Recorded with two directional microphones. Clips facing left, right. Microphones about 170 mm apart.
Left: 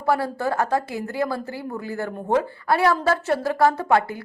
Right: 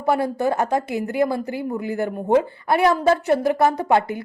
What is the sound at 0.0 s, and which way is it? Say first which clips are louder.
A woman's voice: right 3 dB; 20° right (ahead or behind).